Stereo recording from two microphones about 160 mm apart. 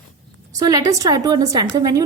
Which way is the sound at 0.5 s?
25° right (ahead or behind).